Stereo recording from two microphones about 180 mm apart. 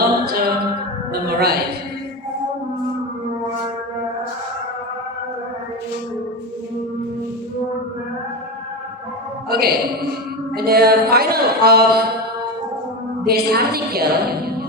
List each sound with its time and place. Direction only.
0.0 s a capella: 60° right (ahead or behind)
1.1 s a sound: 60° right (ahead or behind)
9.5 s music: 60° right (ahead or behind)
10.5 s a woman's voice: 60° right (ahead or behind)
13.2 s a woman's voice: 60° right (ahead or behind)